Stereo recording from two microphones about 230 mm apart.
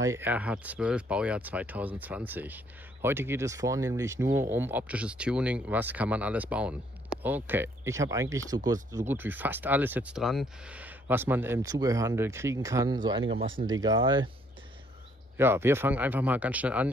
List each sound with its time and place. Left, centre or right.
0.0 s speech: centre
15.3 s speech: centre